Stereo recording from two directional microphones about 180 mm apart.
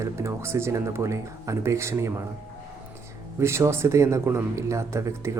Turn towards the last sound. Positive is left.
turn(degrees=-15)  # may be behind; listen again after turning